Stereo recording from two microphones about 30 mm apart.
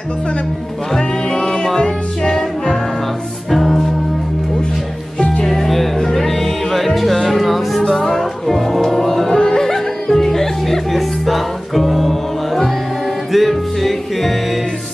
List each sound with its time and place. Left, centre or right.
0.9 s music: centre
3.4 s music: centre
5.4 s music: centre
9.3 s music: left
9.6 s music: centre
10.9 s music: centre
13.3 s music: centre